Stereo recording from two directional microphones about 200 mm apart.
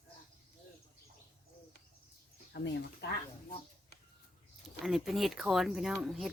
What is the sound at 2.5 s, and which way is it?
Speech, 55° left (ahead or behind).